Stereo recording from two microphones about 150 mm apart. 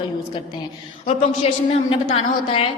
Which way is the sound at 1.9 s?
35° left (ahead or behind).